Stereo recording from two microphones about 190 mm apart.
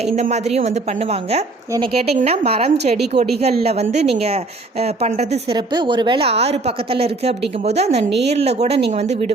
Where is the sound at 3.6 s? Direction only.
35° right (ahead or behind).